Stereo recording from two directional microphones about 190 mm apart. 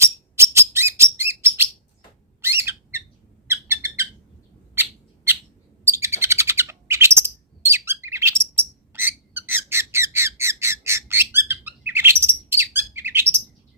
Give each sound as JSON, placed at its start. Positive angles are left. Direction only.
{"t": 0.0, "sound": "bird", "side_deg": -15}
{"t": 2.4, "sound": "squeak", "side_deg": -10}
{"t": 3.4, "sound": "bird", "side_deg": -15}